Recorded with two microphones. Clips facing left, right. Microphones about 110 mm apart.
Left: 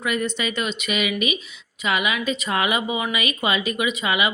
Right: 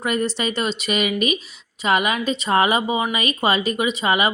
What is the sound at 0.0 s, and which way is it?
Speech, 40° right (ahead or behind).